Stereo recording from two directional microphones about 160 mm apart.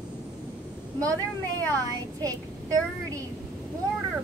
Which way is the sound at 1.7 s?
20° right (ahead or behind).